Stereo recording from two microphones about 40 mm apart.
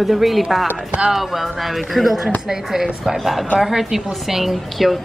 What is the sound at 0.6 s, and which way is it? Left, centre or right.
Speech, right.